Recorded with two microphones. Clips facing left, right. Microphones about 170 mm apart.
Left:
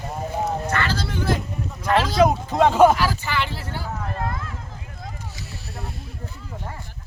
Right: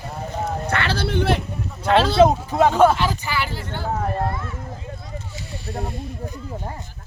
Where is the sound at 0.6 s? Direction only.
65° right (ahead or behind).